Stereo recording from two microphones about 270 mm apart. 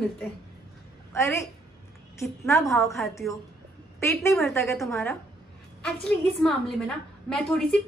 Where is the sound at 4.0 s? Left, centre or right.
Centre.